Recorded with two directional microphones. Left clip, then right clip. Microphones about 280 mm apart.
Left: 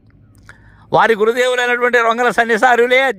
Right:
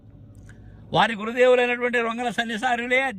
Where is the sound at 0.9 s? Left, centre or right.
Centre.